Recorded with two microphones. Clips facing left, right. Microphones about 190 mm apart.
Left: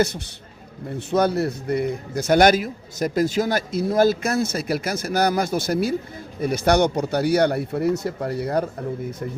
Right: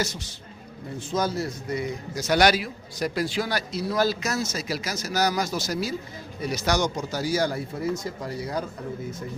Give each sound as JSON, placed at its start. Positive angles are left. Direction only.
{"t": 0.9, "sound": "a man's voice", "side_deg": 60}